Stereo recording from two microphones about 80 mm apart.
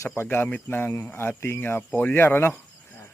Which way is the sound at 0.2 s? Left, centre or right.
Left.